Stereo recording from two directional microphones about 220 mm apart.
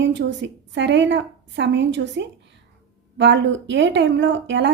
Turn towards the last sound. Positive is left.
turn(degrees=-55)  # may be behind; listen again after turning